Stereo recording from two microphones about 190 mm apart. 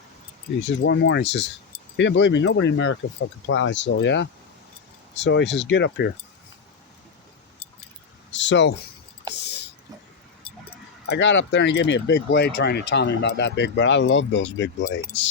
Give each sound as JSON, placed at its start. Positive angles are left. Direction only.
{"t": 0.8, "sound": "speech", "side_deg": 65}
{"t": 8.3, "sound": "a sound", "side_deg": 70}
{"t": 9.3, "sound": "whispering", "side_deg": 65}
{"t": 11.1, "sound": "speech", "side_deg": 75}